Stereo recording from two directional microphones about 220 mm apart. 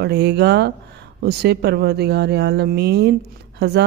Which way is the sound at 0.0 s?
50° right (ahead or behind).